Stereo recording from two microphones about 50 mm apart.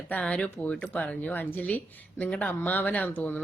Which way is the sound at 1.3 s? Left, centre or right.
Left.